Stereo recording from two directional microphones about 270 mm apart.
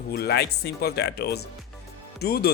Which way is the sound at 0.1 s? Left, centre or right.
Left.